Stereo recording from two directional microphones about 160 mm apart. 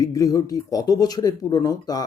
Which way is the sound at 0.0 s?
20° left (ahead or behind).